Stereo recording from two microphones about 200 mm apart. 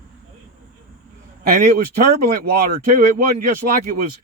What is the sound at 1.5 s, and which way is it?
Speech, 45° right (ahead or behind).